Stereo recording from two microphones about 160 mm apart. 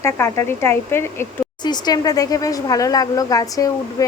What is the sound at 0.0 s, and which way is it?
Speech, 15° left (ahead or behind).